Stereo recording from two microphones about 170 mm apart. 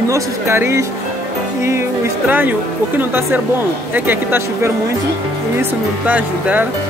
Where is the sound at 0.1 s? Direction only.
15° right (ahead or behind).